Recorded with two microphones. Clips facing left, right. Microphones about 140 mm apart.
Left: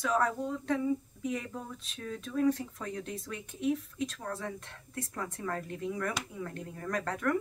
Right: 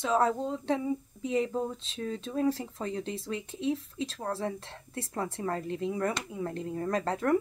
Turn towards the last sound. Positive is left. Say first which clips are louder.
# right 3 dB
turn(degrees=-30)  # may be behind; listen again after turning